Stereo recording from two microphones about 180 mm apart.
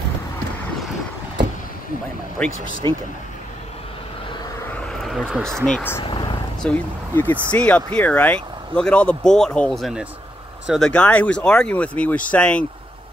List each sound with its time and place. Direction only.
2.4 s speech: 5° left (ahead or behind)
2.8 s speech: 25° right (ahead or behind)
4.6 s a sound: 5° left (ahead or behind)
5.7 s speech: 10° left (ahead or behind)
6.0 s vehicle: 25° left (ahead or behind)
6.6 s speech: 10° left (ahead or behind)